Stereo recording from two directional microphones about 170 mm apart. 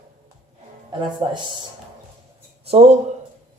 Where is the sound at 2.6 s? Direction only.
35° right (ahead or behind).